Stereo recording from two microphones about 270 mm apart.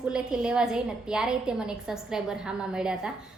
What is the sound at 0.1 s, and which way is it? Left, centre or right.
A woman's voice, centre.